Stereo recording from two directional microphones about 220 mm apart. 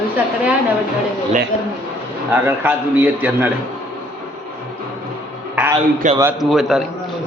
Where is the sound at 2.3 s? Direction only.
10° right (ahead or behind).